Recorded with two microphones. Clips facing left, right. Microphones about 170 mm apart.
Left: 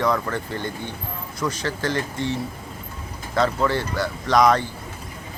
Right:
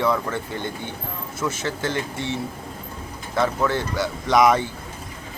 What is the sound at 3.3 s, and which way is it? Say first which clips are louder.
Speech: left 1 dB; 10° right (ahead or behind).